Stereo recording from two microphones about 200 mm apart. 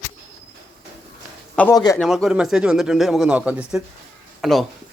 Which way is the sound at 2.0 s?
Centre (ahead or behind).